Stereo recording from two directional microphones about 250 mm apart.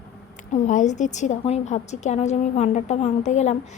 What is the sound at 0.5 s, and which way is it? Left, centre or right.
Speech, left.